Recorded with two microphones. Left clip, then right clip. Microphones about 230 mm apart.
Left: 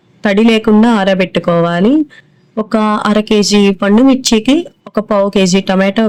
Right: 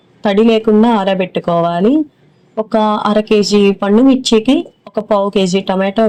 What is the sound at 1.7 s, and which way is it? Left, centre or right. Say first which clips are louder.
Speech: left 1 dB; left.